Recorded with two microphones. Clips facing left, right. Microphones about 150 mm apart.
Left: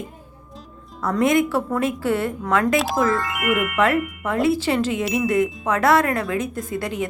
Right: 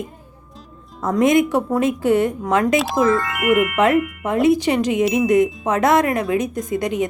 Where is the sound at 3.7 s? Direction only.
20° right (ahead or behind).